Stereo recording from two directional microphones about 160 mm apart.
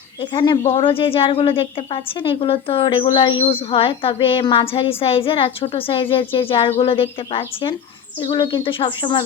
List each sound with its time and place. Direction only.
0.2 s a woman's voice: 30° left (ahead or behind)